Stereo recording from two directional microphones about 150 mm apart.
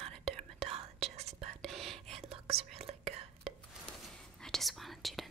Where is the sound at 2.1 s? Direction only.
40° right (ahead or behind).